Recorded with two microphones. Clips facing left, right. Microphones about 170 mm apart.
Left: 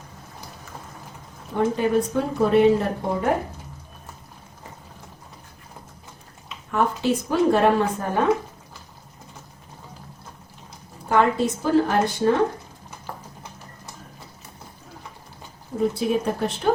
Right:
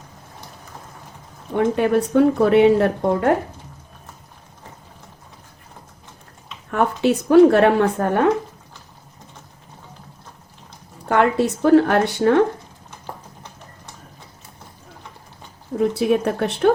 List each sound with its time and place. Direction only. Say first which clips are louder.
1.5 s a woman's voice: right 3 dB; 65° right (ahead or behind)
6.7 s speech: right 3 dB; 65° right (ahead or behind)
11.1 s a woman's voice: right 2 dB; 65° right (ahead or behind)
16.0 s a woman's voice: right 4 dB; 70° right (ahead or behind)